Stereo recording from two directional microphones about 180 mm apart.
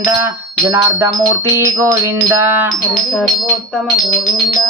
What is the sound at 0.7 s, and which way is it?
Music, 15° right (ahead or behind).